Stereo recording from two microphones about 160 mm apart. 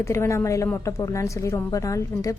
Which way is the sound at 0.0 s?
20° left (ahead or behind).